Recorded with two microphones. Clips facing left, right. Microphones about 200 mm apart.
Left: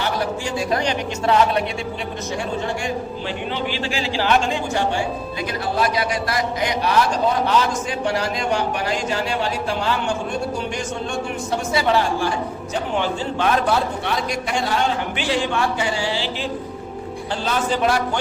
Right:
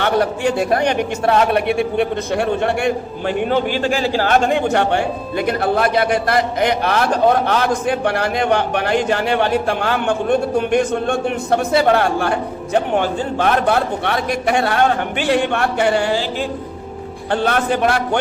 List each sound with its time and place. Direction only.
0.0 s a man's voice: 60° right (ahead or behind)
17.3 s a man's voice: 60° right (ahead or behind)